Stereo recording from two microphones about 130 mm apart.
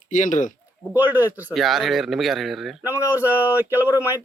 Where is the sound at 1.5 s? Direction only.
Centre (ahead or behind).